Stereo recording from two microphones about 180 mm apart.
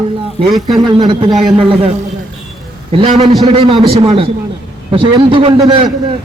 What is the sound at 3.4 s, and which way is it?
A man's voice, 30° right (ahead or behind).